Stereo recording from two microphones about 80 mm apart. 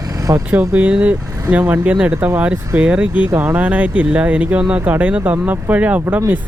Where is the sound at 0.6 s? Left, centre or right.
Centre.